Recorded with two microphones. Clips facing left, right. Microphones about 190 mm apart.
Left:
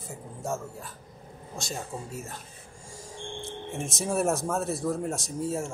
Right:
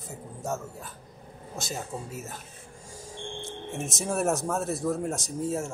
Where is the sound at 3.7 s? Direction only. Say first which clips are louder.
Left 1 dB; centre (ahead or behind).